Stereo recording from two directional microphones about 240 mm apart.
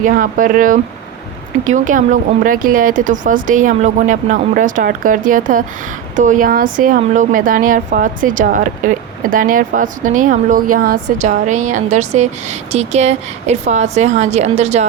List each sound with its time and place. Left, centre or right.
0.0 s speech: right